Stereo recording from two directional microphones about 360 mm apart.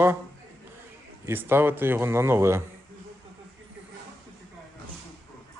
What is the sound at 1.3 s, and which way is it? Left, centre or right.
A man's voice, centre.